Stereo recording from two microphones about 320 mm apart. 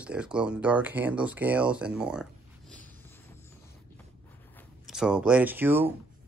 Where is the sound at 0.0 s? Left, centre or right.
Centre.